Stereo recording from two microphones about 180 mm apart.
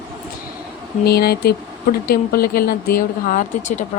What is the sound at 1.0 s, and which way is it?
Speech, 60° left (ahead or behind).